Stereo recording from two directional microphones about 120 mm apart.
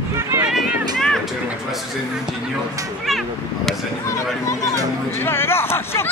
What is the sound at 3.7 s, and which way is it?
Speech, 5° left (ahead or behind).